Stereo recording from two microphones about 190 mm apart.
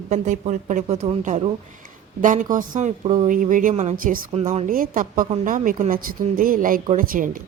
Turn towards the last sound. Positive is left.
turn(degrees=-45)  # may be behind; listen again after turning